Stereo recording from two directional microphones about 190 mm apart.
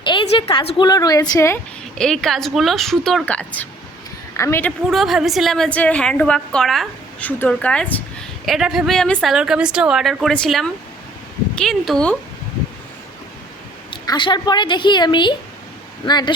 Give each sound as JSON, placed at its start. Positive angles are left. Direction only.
{"t": 0.0, "sound": "a woman's voice", "side_deg": 25}
{"t": 2.0, "sound": "a woman's voice", "side_deg": 0}
{"t": 4.9, "sound": "a woman's voice", "side_deg": 0}
{"t": 13.9, "sound": "a woman's voice", "side_deg": 25}